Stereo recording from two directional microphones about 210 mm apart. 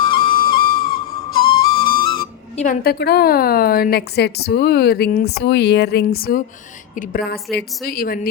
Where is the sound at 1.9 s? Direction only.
45° left (ahead or behind).